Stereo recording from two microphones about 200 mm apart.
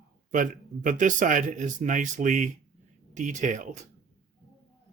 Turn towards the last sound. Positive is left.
turn(degrees=-40)  # may be behind; listen again after turning